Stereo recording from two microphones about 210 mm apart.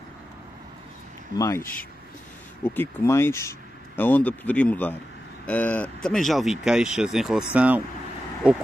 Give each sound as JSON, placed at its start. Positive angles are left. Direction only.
{"t": 1.3, "sound": "speech", "side_deg": 15}
{"t": 2.6, "sound": "speech", "side_deg": 10}